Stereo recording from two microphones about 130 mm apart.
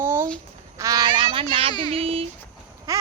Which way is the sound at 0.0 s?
20° right (ahead or behind).